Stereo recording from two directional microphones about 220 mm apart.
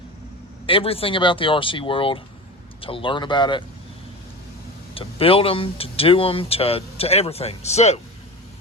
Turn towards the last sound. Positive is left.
turn(degrees=30)  # may be behind; listen again after turning